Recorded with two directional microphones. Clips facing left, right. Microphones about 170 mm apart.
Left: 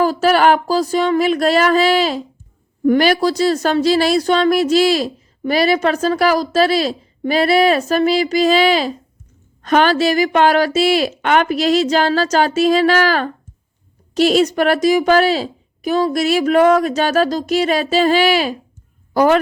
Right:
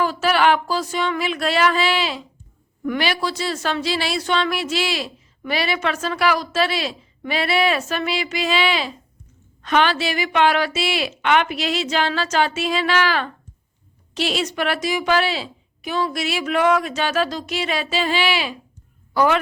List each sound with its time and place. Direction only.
0.0 s speech: 40° left (ahead or behind)